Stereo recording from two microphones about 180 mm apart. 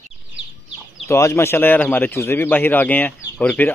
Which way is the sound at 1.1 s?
15° left (ahead or behind).